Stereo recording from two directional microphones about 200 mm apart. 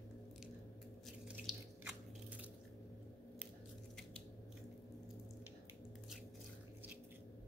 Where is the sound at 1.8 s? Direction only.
5° right (ahead or behind).